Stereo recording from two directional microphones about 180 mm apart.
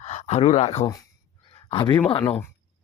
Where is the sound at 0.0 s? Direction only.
40° left (ahead or behind).